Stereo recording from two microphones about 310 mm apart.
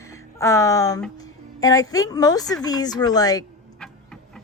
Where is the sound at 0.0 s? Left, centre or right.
Centre.